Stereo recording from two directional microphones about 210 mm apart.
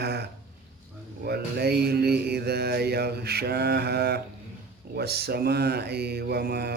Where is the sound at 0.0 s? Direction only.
50° right (ahead or behind).